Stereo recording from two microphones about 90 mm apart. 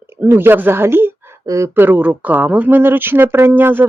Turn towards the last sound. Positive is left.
turn(degrees=-25)  # may be behind; listen again after turning